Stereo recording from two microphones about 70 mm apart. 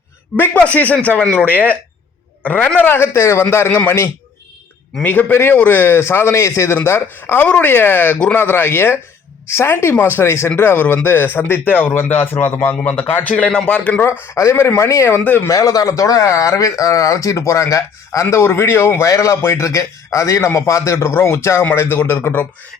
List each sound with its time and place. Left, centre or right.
0.3 s a man's voice: left
5.0 s a man's voice: left
14.3 s a man's voice: left
15.2 s speech: left
15.4 s a man's voice: left